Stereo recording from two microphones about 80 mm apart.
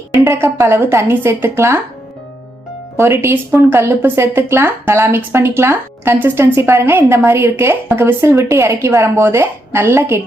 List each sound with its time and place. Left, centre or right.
0.3 s speech: right
3.0 s speech: right